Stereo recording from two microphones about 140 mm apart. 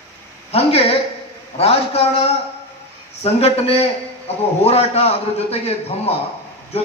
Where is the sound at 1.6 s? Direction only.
45° left (ahead or behind).